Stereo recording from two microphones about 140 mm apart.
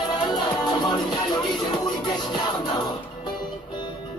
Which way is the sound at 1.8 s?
30° left (ahead or behind).